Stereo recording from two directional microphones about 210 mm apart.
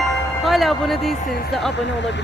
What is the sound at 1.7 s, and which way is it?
Speech, 55° left (ahead or behind).